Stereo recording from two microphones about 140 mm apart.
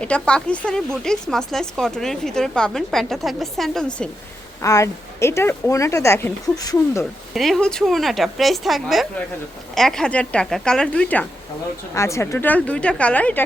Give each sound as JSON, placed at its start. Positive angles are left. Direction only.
{"t": 0.0, "sound": "speech", "side_deg": 5}
{"t": 4.6, "sound": "speech", "side_deg": 20}
{"t": 7.0, "sound": "speech", "side_deg": 0}
{"t": 11.9, "sound": "a woman's voice", "side_deg": 20}